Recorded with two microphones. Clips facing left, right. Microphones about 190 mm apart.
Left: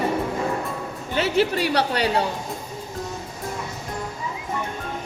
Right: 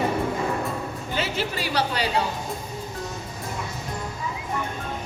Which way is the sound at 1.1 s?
60° left (ahead or behind).